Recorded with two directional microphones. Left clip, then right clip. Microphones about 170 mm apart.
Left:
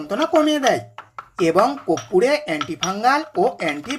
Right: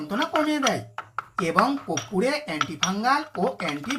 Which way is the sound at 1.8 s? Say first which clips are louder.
Left 8 dB; 30° left (ahead or behind).